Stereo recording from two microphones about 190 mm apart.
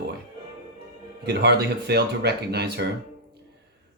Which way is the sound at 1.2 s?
60° right (ahead or behind).